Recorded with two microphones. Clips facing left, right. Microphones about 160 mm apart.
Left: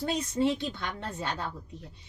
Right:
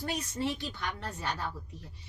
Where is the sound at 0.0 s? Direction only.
25° left (ahead or behind).